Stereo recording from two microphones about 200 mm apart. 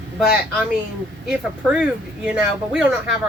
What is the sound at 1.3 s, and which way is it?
Speech, 5° right (ahead or behind).